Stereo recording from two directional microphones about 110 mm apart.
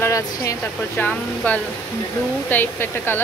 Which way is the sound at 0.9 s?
15° left (ahead or behind).